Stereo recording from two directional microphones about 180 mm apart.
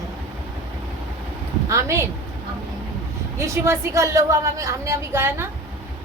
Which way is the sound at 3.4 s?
15° right (ahead or behind).